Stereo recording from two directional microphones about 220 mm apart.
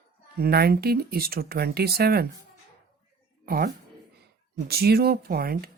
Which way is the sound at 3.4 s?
45° right (ahead or behind).